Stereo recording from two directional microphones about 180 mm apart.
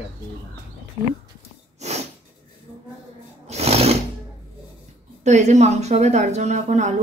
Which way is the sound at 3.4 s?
35° right (ahead or behind).